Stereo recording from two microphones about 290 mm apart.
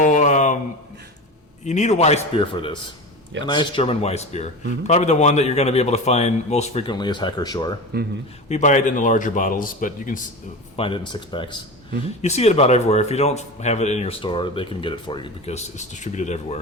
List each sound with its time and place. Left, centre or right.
0.0 s a sound: left
1.6 s speech: left
7.9 s speech: right
8.4 s speech: left
10.8 s speech: centre